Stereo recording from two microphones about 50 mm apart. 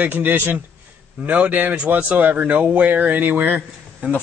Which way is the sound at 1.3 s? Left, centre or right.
Right.